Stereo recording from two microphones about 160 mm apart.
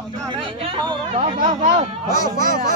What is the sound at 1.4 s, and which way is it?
Speech, 50° right (ahead or behind).